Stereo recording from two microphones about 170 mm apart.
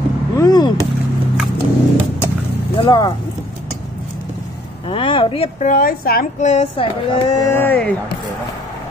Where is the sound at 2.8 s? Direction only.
25° left (ahead or behind).